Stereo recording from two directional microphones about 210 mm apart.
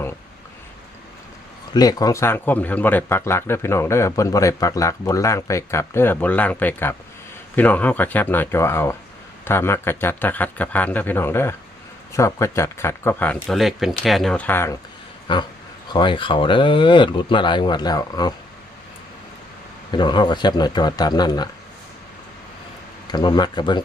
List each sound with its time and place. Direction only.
1.7 s a man's voice: 20° left (ahead or behind)
15.3 s speech: 20° left (ahead or behind)
19.9 s speech: 20° left (ahead or behind)
23.1 s speech: 20° left (ahead or behind)